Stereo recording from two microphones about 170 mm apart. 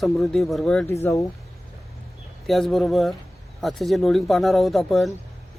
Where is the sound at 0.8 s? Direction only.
15° left (ahead or behind).